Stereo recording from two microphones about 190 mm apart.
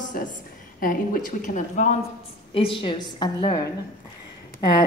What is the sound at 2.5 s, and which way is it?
A woman's voice, 25° left (ahead or behind).